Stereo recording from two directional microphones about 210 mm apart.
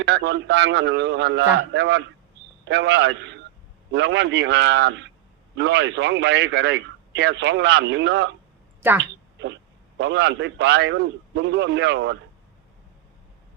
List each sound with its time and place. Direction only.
0.0 s a man's voice: 55° right (ahead or behind)
8.8 s a woman's voice: 10° right (ahead or behind)
10.0 s a man's voice: 55° right (ahead or behind)